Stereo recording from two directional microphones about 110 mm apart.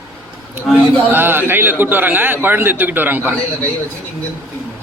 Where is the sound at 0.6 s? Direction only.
20° right (ahead or behind).